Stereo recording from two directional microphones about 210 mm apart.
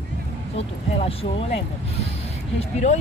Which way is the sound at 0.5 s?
30° left (ahead or behind).